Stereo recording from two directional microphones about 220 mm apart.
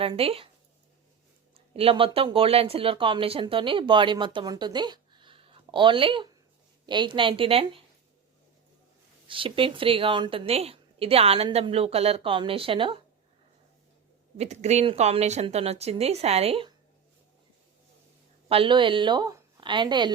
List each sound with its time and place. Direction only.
0.0 s speech: 25° right (ahead or behind)
1.5 s speech: 25° right (ahead or behind)
9.2 s speech: 25° right (ahead or behind)
14.3 s speech: 30° right (ahead or behind)
18.4 s a woman's voice: 25° right (ahead or behind)